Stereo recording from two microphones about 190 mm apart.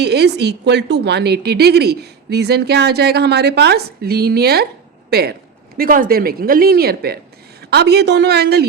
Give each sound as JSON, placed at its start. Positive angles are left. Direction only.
{"t": 0.0, "sound": "a woman's voice", "side_deg": -60}
{"t": 5.7, "sound": "a woman's voice", "side_deg": -50}